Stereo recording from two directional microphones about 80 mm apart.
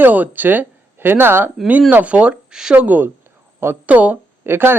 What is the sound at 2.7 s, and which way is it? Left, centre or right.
Speech, right.